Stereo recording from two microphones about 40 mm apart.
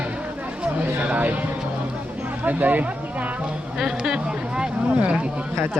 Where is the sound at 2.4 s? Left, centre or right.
Right.